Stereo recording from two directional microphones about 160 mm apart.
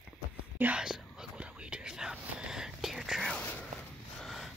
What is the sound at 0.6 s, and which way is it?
Whispering, 5° right (ahead or behind).